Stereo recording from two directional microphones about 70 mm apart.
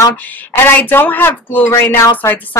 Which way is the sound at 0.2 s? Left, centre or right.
Left.